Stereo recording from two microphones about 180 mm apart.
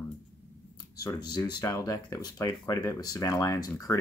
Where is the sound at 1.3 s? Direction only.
20° left (ahead or behind).